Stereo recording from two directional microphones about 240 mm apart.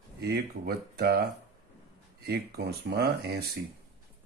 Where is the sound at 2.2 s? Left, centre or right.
Right.